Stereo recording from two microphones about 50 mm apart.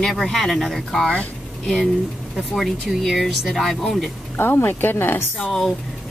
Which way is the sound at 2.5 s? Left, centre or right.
Centre.